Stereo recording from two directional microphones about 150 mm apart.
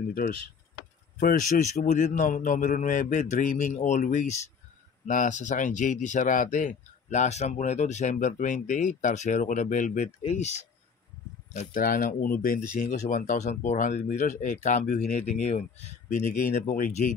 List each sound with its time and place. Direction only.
1.2 s speech: 60° left (ahead or behind)
11.5 s speech: 65° left (ahead or behind)